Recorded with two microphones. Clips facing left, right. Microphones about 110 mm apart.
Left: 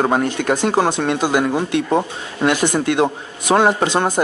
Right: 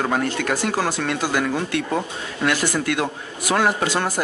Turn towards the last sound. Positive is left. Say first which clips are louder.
# left 5 dB
turn(degrees=20)  # may be behind; listen again after turning